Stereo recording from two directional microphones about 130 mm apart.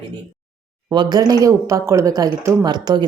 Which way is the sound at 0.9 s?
35° right (ahead or behind).